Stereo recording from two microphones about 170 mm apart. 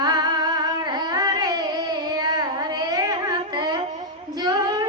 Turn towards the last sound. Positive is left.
turn(degrees=-25)  # may be behind; listen again after turning